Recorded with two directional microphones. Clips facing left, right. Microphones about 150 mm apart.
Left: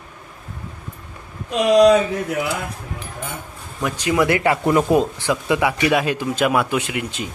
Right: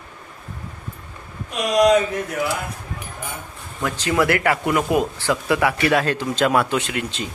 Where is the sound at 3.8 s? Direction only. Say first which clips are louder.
Left 1 dB; 15° left (ahead or behind); by 5.0 s 30° left (ahead or behind).